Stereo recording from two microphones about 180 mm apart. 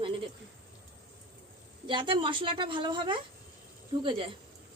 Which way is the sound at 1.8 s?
25° right (ahead or behind).